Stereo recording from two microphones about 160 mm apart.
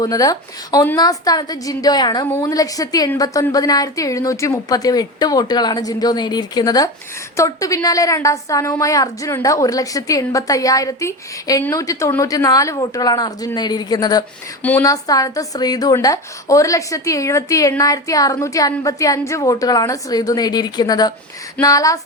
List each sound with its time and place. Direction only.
0.0 s a woman's voice: 20° left (ahead or behind)
14.6 s a woman's voice: 10° left (ahead or behind)
14.8 s a woman's voice: 20° left (ahead or behind)